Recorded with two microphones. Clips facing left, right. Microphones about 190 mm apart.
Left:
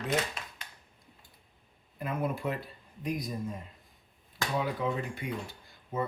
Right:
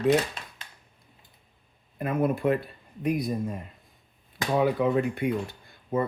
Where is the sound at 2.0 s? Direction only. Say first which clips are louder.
Right 8 dB; 55° right (ahead or behind).